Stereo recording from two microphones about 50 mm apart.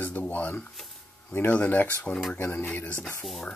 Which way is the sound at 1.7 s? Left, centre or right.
Left.